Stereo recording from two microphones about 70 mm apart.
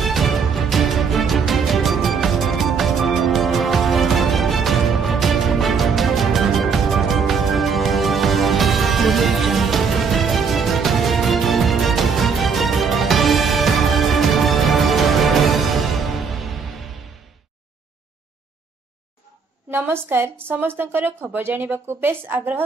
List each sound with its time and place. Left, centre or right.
0.0 s music: centre
19.7 s a woman's voice: right